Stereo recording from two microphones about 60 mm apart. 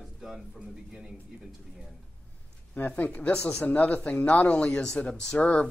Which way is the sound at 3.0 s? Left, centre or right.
Left.